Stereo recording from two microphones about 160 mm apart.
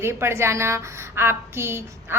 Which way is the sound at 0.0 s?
15° right (ahead or behind).